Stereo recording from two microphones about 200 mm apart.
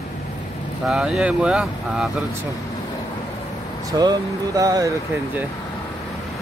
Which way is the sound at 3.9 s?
20° right (ahead or behind).